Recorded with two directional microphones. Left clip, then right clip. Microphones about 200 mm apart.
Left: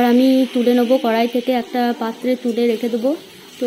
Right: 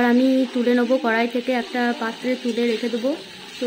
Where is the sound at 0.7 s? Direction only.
10° left (ahead or behind).